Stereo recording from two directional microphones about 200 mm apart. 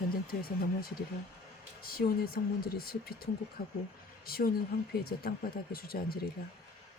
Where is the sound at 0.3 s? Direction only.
50° left (ahead or behind).